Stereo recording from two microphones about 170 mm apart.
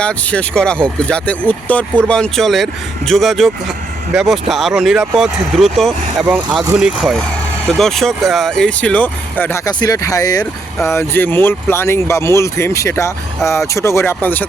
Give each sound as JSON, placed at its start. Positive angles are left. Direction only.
{"t": 0.0, "sound": "speech", "side_deg": 5}